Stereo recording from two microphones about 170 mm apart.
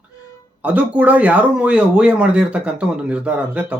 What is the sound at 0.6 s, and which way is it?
Speech, 10° right (ahead or behind).